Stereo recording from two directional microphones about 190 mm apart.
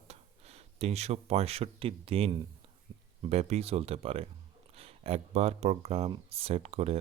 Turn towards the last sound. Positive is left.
turn(degrees=-35)  # may be behind; listen again after turning